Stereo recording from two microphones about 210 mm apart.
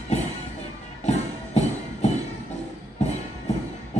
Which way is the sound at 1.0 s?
30° left (ahead or behind).